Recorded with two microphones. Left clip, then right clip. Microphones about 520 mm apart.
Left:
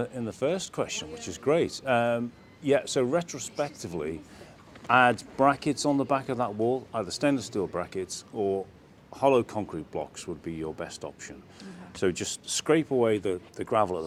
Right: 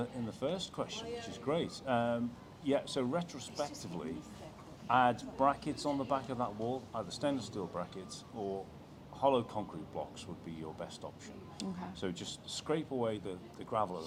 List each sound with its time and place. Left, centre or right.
0.0 s speech: left